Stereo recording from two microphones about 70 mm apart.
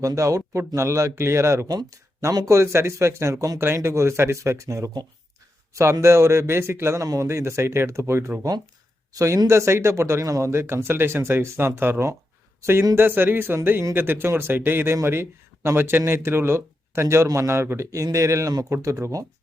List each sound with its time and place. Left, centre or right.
0.0 s speech: right
1.6 s speech: right
2.5 s speech: right
7.0 s speech: right
10.5 s speech: right